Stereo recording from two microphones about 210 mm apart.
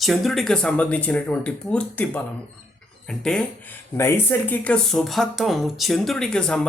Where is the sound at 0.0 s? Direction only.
Centre (ahead or behind).